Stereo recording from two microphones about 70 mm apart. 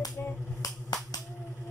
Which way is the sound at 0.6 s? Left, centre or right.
Left.